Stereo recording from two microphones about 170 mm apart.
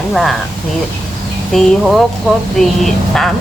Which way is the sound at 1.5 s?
Centre (ahead or behind).